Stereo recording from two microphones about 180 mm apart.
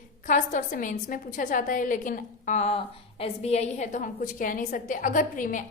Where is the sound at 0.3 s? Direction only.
45° left (ahead or behind).